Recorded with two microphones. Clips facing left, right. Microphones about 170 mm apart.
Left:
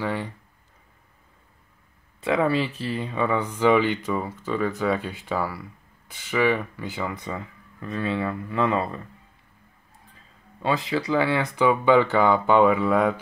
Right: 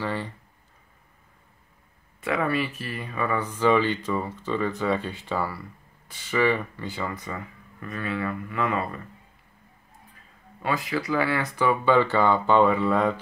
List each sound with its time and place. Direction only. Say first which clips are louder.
0.0 s speech: left 2 dB; 15° left (ahead or behind)
2.1 s speech: left 3 dB; 25° left (ahead or behind)
10.6 s speech: left 3 dB; 25° left (ahead or behind); by 13.2 s 10° left (ahead or behind)